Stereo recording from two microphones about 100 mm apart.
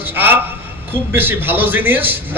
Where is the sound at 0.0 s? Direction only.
20° right (ahead or behind).